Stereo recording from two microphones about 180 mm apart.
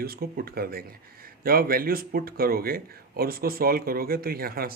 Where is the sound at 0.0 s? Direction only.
55° right (ahead or behind).